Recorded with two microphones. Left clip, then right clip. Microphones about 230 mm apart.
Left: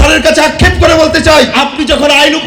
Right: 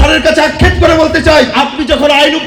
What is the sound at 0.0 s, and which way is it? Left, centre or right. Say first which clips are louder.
A man's voice: left 1 dB; left.